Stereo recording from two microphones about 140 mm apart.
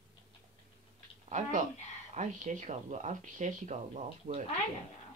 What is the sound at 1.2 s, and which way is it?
Speech, 65° right (ahead or behind).